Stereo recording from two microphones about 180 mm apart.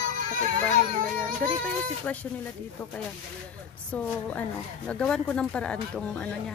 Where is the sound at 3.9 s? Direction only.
10° left (ahead or behind).